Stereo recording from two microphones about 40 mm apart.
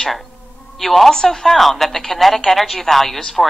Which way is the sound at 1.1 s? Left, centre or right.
Centre.